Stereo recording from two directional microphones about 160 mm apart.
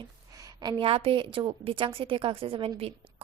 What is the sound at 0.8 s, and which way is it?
A woman's voice, 35° right (ahead or behind).